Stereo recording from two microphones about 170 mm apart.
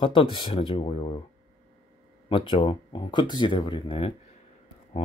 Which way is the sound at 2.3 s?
30° left (ahead or behind).